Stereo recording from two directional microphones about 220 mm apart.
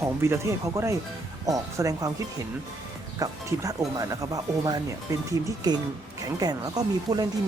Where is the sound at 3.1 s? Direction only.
15° right (ahead or behind).